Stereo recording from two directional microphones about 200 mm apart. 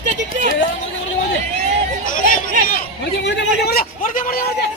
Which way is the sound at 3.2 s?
60° left (ahead or behind).